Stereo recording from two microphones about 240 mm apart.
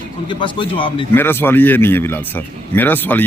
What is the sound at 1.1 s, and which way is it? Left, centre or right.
Speech, centre.